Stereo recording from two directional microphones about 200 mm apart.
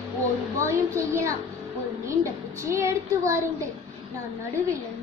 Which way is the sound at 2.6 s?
15° right (ahead or behind).